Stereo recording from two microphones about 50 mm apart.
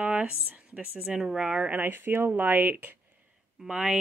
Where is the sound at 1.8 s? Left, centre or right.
Right.